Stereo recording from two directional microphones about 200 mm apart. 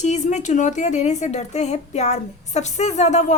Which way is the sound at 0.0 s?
35° left (ahead or behind).